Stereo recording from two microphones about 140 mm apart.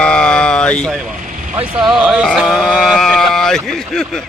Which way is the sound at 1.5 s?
10° right (ahead or behind).